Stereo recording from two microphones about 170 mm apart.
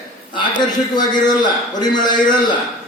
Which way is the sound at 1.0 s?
25° left (ahead or behind).